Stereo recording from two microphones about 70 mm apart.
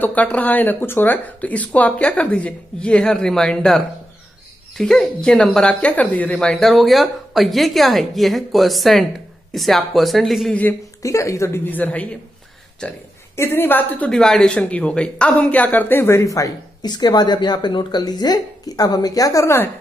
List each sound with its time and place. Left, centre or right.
0.0 s a woman's voice: left
6.3 s a woman's voice: centre
10.5 s speech: left
11.0 s speech: left
11.6 s speech: left
13.4 s speech: left
14.0 s a woman's voice: centre; by 16.3 s left
16.3 s speech: left
16.8 s speech: left
19.4 s a woman's voice: left